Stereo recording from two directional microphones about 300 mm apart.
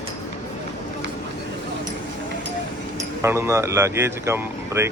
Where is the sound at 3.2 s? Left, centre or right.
Centre.